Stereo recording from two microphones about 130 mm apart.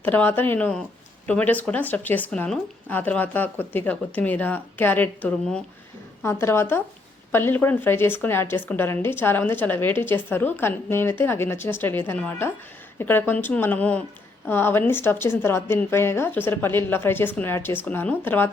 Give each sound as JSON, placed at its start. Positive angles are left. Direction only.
{"t": 0.0, "sound": "a woman's voice", "side_deg": 15}